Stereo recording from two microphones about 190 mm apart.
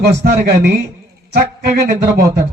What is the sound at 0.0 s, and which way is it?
Speech, 60° right (ahead or behind).